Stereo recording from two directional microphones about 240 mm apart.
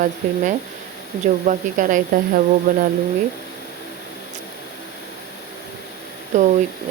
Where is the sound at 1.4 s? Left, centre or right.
Right.